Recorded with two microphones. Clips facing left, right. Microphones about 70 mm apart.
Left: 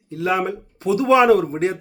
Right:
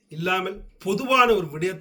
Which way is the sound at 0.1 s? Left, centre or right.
Left.